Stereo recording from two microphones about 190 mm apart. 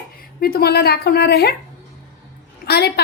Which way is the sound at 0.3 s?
55° left (ahead or behind).